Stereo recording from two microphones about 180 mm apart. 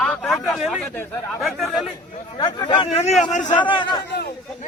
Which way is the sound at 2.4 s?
25° left (ahead or behind).